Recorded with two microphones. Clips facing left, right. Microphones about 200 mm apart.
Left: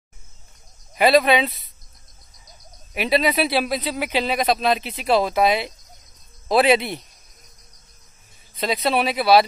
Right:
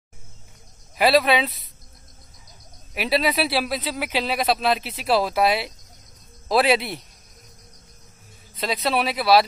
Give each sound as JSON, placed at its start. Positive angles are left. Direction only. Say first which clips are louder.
{"t": 0.9, "sound": "speech", "louder": "left 2 dB", "side_deg": 0}
{"t": 2.9, "sound": "speech", "louder": "left 2 dB", "side_deg": 0}
{"t": 8.5, "sound": "speech", "louder": "left 2 dB", "side_deg": 0}